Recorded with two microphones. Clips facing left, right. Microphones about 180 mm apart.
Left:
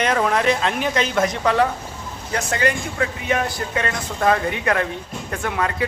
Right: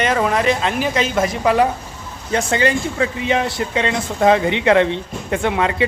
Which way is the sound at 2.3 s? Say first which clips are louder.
Right 4 dB; 30° right (ahead or behind).